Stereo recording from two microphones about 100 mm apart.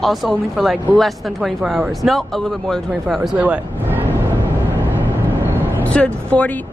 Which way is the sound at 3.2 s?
15° right (ahead or behind).